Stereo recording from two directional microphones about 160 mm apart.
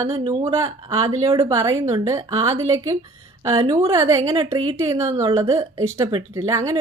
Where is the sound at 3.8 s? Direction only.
20° right (ahead or behind).